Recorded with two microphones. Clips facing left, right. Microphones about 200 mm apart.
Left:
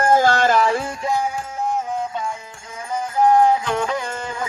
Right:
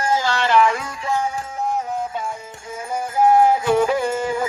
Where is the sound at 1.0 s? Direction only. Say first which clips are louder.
Right 1 dB; 15° left (ahead or behind).